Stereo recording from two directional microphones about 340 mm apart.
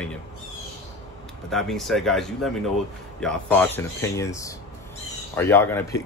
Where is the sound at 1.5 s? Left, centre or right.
Centre.